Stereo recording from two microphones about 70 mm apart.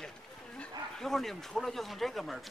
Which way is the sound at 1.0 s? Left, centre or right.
Centre.